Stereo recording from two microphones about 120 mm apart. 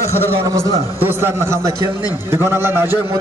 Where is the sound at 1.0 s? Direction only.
20° right (ahead or behind).